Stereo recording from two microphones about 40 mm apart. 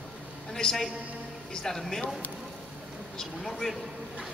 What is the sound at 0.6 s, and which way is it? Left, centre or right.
A man's voice, centre.